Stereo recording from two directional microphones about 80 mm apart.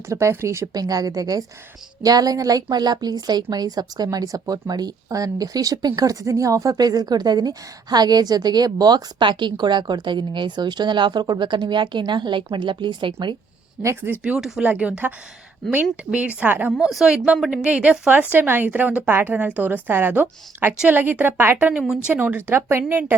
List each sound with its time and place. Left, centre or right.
0.1 s speech: right
0.8 s a woman's voice: right
13.8 s a woman's voice: right
14.3 s speech: centre
14.6 s a woman's voice: centre
16.7 s a woman's voice: centre; by 21.7 s right
21.7 s a woman's voice: centre